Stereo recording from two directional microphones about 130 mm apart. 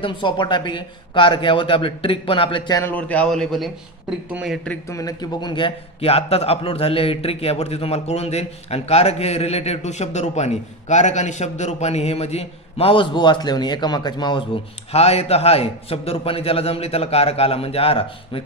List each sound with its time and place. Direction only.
0.0 s speech: 40° left (ahead or behind)
2.8 s a man's voice: 10° left (ahead or behind); by 4.6 s 5° right (ahead or behind)
4.8 s a man's voice: 25° left (ahead or behind)
14.9 s a man's voice: 55° left (ahead or behind)